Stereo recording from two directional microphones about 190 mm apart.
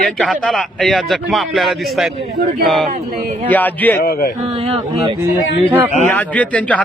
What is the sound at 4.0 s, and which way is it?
Speech, 55° left (ahead or behind).